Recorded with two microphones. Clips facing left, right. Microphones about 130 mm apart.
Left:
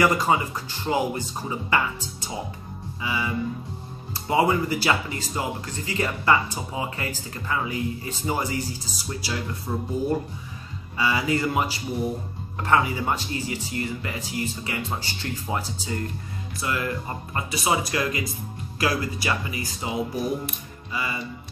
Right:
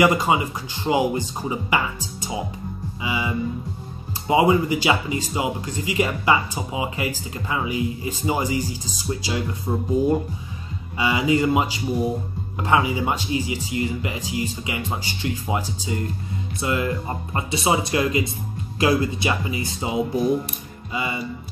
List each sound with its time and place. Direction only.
0.0 s speech: 15° right (ahead or behind)
3.0 s music: 15° right (ahead or behind)
4.3 s speech: 15° right (ahead or behind)